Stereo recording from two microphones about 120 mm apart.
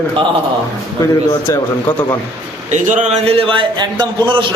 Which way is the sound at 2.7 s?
90° right.